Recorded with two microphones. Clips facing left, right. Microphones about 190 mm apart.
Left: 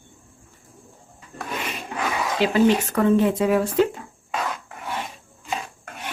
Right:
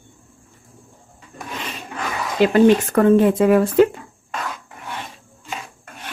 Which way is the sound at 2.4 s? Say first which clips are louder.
Right 5 dB; 50° right (ahead or behind).